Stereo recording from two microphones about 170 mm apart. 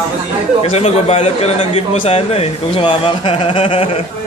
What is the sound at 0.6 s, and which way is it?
A man's voice, 35° left (ahead or behind).